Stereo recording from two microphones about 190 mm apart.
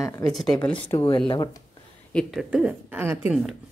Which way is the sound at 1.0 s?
25° left (ahead or behind).